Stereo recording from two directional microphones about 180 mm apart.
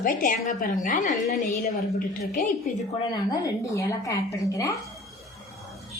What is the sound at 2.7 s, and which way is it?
Speech, 45° left (ahead or behind).